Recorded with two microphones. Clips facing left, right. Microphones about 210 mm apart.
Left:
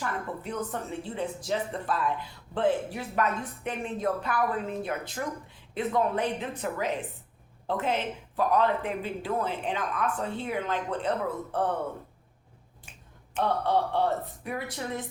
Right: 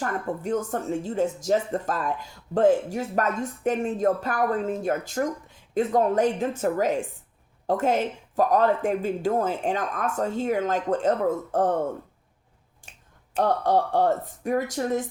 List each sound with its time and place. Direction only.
0.0 s a woman's voice: 45° right (ahead or behind)
13.3 s a woman's voice: 45° right (ahead or behind)